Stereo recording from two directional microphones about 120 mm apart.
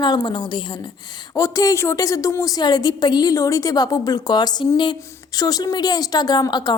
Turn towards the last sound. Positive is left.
turn(degrees=35)  # may be behind; listen again after turning